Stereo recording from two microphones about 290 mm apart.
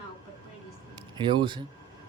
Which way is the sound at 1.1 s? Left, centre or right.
Centre.